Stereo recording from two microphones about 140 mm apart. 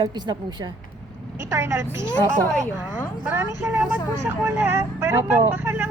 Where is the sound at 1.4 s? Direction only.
20° right (ahead or behind).